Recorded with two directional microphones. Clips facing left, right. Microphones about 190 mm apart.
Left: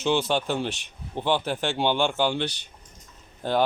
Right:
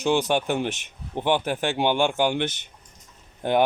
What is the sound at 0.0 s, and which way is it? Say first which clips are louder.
Speech: right 2 dB; 15° right (ahead or behind).